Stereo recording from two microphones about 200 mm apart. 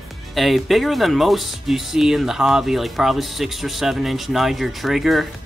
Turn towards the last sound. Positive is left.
turn(degrees=0)  # may be behind; listen again after turning